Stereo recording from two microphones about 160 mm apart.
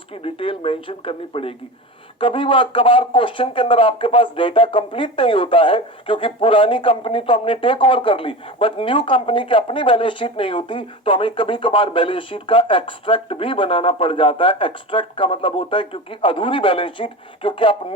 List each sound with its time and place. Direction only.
0.2 s speech: 35° left (ahead or behind)